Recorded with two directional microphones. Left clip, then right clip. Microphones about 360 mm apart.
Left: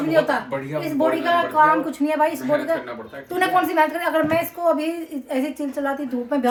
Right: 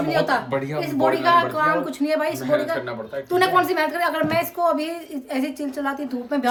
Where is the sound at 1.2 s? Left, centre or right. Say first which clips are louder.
Left 2 dB; centre.